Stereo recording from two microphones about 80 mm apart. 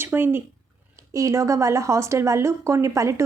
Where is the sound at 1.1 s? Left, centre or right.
Right.